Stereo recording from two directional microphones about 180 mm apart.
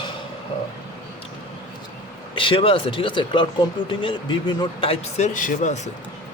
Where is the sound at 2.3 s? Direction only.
30° left (ahead or behind).